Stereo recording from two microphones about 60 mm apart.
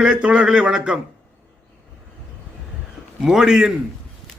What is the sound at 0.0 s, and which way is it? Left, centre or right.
Speech, centre.